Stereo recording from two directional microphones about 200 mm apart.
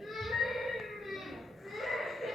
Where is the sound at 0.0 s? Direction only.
Centre (ahead or behind).